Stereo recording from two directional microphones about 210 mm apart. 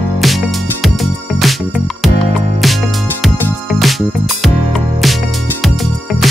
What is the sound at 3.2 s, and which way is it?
Music, centre (ahead or behind).